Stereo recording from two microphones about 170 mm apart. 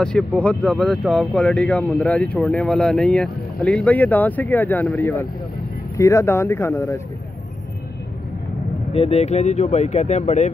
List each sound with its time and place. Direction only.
0.0 s speech: 5° left (ahead or behind)
8.9 s speech: 35° left (ahead or behind)